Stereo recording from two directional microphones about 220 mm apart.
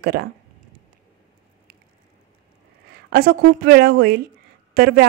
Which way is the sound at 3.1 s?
45° right (ahead or behind).